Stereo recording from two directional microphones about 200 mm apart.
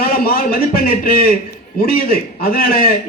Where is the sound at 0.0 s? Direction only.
50° left (ahead or behind).